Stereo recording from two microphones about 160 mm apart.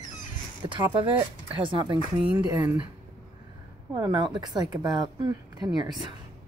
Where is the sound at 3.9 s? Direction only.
25° right (ahead or behind).